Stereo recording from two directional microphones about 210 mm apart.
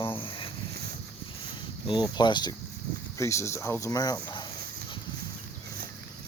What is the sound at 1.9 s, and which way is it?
A child's voice, 20° left (ahead or behind).